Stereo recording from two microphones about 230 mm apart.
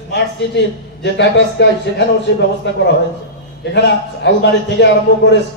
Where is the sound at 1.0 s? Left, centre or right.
Left.